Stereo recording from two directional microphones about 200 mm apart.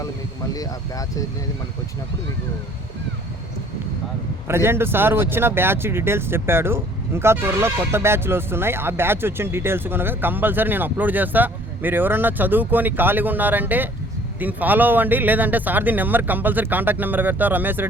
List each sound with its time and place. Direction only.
0.5 s speech: 15° left (ahead or behind)
4.4 s speech: 10° right (ahead or behind)